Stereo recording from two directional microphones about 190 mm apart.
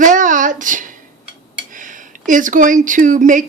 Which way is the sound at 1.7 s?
45° right (ahead or behind).